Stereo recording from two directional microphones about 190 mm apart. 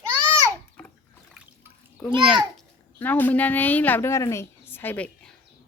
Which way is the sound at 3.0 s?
10° left (ahead or behind).